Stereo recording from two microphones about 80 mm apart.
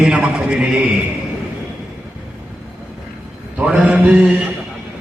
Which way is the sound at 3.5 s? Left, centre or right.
Centre.